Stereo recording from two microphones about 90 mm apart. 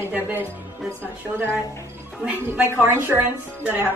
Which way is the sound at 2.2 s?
20° right (ahead or behind).